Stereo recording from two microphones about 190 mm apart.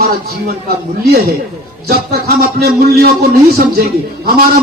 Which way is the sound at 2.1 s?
55° right (ahead or behind).